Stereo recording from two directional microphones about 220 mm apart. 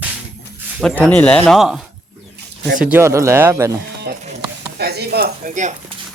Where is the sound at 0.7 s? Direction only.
5° left (ahead or behind).